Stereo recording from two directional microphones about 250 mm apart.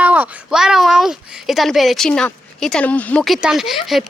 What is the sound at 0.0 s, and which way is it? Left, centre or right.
Speech, centre.